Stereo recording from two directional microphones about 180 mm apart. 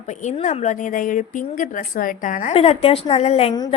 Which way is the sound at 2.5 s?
35° left (ahead or behind).